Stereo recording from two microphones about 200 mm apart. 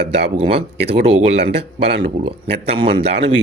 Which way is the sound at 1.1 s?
55° right (ahead or behind).